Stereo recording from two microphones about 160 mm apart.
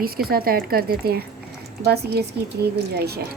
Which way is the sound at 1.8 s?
85° right.